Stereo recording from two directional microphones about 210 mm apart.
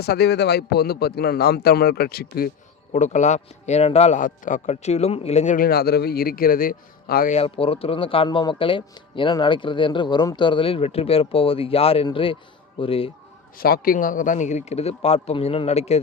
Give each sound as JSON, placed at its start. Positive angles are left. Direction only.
{"t": 0.0, "sound": "a man's voice", "side_deg": 50}
{"t": 2.9, "sound": "a man's voice", "side_deg": 35}
{"t": 7.3, "sound": "speech", "side_deg": 25}
{"t": 13.6, "sound": "a man's voice", "side_deg": 45}